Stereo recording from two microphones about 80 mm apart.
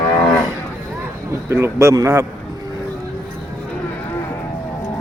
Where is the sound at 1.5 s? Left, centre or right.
Right.